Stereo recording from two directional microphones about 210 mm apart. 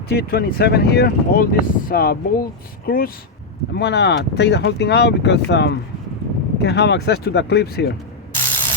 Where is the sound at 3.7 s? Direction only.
55° left (ahead or behind).